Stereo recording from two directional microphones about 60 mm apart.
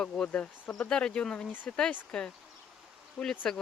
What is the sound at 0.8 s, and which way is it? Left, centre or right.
Speech, centre.